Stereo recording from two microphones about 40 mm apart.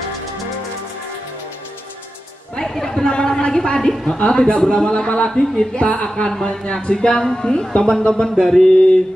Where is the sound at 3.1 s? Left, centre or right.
Left.